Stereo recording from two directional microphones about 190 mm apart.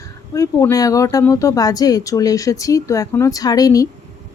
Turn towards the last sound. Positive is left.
turn(degrees=20)  # may be behind; listen again after turning